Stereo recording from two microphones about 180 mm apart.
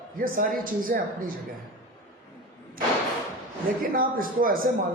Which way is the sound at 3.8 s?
50° right (ahead or behind).